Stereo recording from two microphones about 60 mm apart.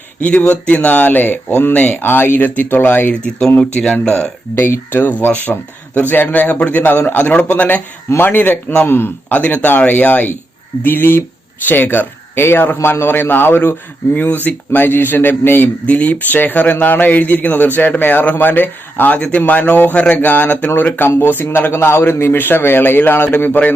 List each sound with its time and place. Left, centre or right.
0.2 s a man's voice: left
4.5 s a man's voice: left
14.1 s a man's voice: left